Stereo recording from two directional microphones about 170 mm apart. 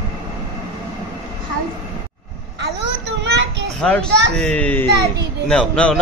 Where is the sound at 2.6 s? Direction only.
85° right.